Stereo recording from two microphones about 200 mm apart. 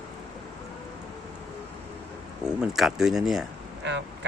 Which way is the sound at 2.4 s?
Centre (ahead or behind).